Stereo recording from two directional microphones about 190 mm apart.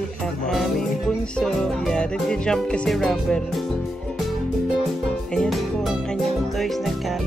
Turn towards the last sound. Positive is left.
turn(degrees=0)  # may be behind; listen again after turning